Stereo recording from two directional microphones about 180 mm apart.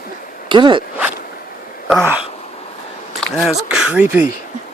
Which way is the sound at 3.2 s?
Centre (ahead or behind).